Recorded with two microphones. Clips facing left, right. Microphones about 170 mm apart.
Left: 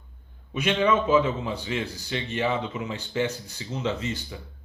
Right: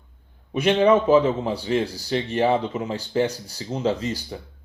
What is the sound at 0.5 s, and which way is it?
Speech, 35° right (ahead or behind).